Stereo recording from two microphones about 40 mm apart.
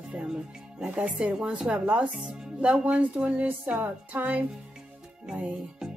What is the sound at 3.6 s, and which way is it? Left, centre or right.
Music, right.